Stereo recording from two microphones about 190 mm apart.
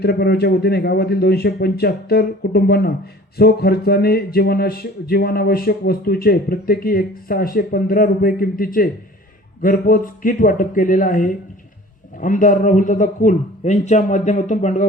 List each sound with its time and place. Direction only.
0.0 s a man's voice: 55° left (ahead or behind); by 14.8 s 40° left (ahead or behind)